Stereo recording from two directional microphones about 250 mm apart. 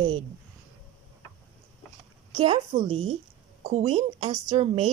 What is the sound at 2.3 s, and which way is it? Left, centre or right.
A woman's voice, centre.